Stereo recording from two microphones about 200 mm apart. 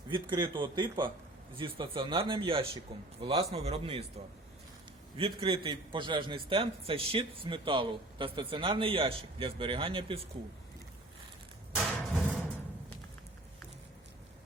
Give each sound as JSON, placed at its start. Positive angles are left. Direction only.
{"t": 0.1, "sound": "a man's voice", "side_deg": -25}
{"t": 5.1, "sound": "a man's voice", "side_deg": -25}
{"t": 11.8, "sound": "a sound", "side_deg": -5}